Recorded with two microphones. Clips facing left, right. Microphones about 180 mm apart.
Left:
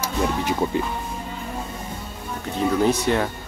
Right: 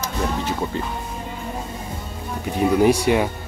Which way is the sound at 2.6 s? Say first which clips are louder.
Right 4 dB; 15° right (ahead or behind).